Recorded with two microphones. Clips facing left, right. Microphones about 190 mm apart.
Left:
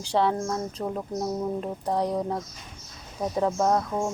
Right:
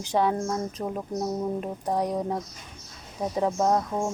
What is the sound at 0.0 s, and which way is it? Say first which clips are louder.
A woman's voice: even; 15° right (ahead or behind).